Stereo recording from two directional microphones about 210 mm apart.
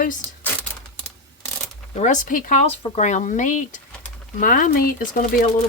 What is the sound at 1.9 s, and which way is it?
Speech, 35° left (ahead or behind).